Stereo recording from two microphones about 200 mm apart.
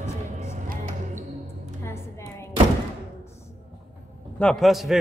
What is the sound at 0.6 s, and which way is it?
Music, 40° right (ahead or behind).